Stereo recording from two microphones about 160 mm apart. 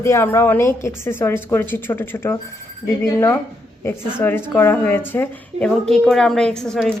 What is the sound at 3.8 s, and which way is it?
Speech, 15° left (ahead or behind).